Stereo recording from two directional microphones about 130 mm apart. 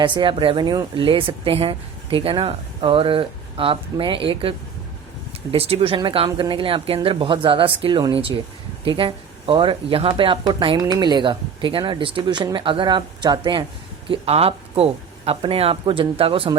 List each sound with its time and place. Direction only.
0.0 s speech: 40° right (ahead or behind)
14.1 s speech: 50° right (ahead or behind)